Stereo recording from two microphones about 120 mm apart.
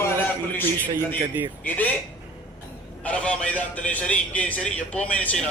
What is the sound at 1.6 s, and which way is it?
Speech, 15° left (ahead or behind).